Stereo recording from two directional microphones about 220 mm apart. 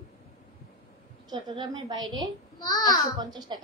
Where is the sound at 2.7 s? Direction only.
20° left (ahead or behind).